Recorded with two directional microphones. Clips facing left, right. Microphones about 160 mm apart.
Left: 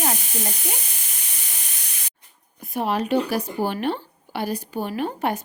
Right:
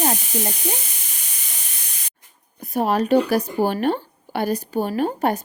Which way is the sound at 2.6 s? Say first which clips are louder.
Right 4 dB; 40° right (ahead or behind).